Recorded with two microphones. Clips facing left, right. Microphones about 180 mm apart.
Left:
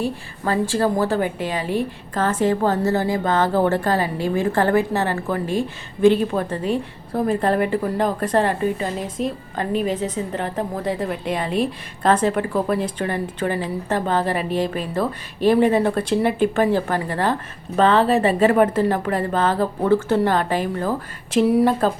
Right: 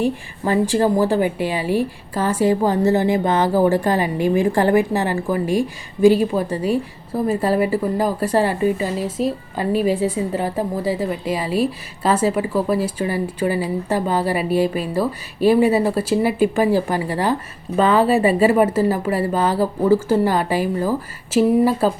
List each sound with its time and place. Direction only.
0.0 s a woman's voice: 15° right (ahead or behind)